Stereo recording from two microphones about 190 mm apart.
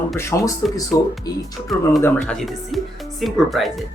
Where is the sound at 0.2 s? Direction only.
15° left (ahead or behind).